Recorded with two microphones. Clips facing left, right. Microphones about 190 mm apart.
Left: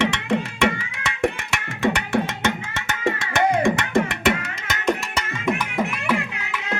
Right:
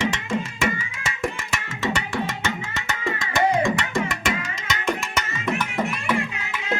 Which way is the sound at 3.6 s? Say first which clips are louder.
Left 3 dB; 60° left (ahead or behind).